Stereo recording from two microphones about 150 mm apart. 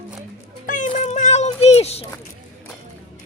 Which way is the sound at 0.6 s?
60° left (ahead or behind).